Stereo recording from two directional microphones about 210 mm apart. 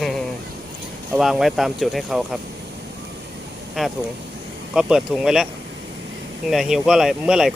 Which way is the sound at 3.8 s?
Centre (ahead or behind).